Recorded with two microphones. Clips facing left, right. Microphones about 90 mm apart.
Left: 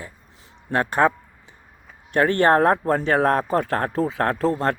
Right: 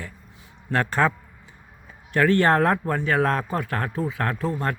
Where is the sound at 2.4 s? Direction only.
25° left (ahead or behind).